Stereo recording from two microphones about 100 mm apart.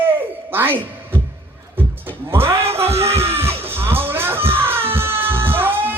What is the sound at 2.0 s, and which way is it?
Music, 25° right (ahead or behind).